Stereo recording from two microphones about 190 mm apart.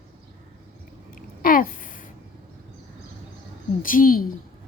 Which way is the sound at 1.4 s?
45° left (ahead or behind).